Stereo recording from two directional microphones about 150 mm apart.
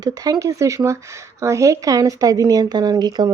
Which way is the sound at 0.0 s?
25° right (ahead or behind).